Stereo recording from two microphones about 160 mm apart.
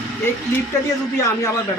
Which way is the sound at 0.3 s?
15° left (ahead or behind).